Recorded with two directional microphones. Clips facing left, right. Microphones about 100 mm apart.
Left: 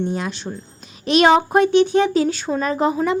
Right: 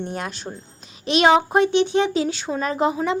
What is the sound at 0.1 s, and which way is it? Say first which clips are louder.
Speech: left 4 dB; 45° right (ahead or behind).